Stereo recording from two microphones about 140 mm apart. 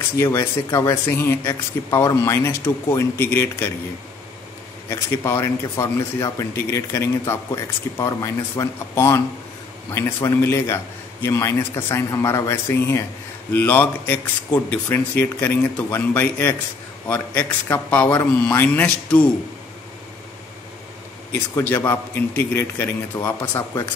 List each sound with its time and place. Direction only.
0.2 s speech: 20° left (ahead or behind)
4.8 s speech: 15° left (ahead or behind)
21.5 s speech: 15° left (ahead or behind)